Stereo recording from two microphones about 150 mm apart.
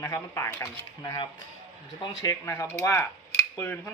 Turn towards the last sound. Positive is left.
turn(degrees=15)  # may be behind; listen again after turning